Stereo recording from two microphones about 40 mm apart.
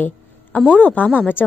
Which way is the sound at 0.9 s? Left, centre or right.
Left.